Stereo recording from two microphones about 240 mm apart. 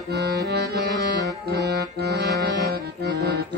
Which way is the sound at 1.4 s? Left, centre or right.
Right.